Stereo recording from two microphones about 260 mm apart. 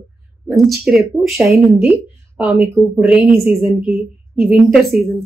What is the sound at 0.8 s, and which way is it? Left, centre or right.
A woman's voice, centre.